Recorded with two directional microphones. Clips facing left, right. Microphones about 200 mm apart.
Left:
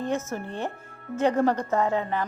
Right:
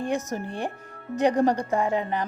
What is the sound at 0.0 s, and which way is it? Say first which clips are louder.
Speech: right 1 dB; 15° right (ahead or behind).